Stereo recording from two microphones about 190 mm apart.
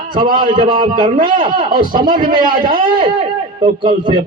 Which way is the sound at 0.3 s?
25° right (ahead or behind).